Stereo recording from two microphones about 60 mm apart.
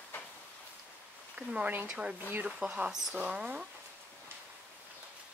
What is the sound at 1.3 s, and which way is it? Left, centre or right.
Speech, right.